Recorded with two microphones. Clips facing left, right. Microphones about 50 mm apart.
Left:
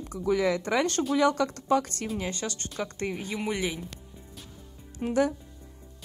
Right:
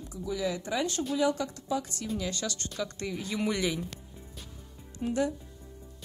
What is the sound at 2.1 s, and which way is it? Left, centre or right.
Speech, left.